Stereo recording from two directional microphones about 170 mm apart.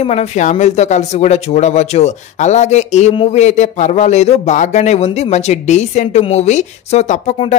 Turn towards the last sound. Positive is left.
turn(degrees=40)  # may be behind; listen again after turning